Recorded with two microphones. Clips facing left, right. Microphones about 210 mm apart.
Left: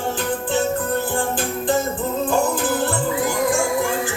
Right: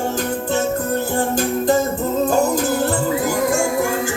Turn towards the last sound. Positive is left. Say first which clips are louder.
# right 2 dB
turn(degrees=-40)  # may be behind; listen again after turning